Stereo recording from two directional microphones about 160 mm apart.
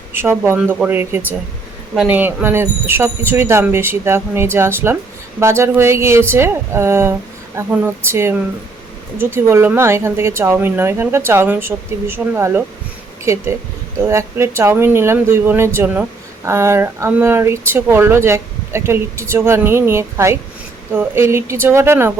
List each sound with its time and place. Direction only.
0.1 s speech: 15° right (ahead or behind)